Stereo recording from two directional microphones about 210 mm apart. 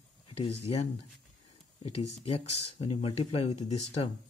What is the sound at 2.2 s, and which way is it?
Speech, 30° left (ahead or behind).